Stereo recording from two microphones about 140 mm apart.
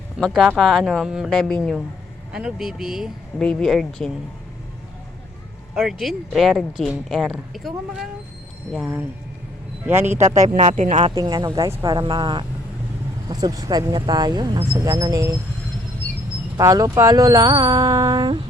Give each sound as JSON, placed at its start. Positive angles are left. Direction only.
{"t": 0.2, "sound": "speech", "side_deg": 0}
{"t": 5.7, "sound": "speech", "side_deg": 0}
{"t": 10.3, "sound": "speech", "side_deg": -65}
{"t": 11.1, "sound": "speech", "side_deg": -25}
{"t": 16.6, "sound": "speech", "side_deg": -25}